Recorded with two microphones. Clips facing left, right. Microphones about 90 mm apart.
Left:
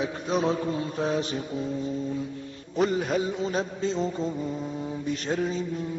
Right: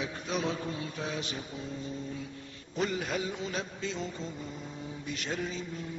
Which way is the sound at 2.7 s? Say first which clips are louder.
Left 7 dB; 35° left (ahead or behind).